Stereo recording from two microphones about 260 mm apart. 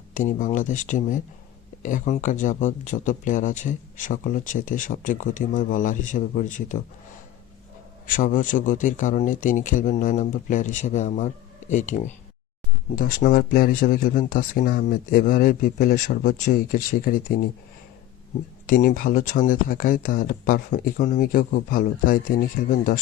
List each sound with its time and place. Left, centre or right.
0.1 s speech: left
8.0 s speech: left
18.6 s speech: left